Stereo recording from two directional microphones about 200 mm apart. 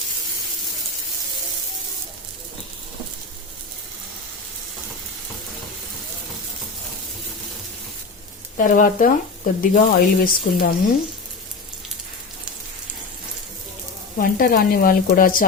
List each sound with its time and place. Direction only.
8.5 s speech: 40° left (ahead or behind)
14.2 s speech: 45° left (ahead or behind)